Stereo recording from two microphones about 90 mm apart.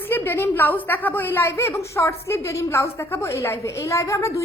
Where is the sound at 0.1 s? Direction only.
25° left (ahead or behind).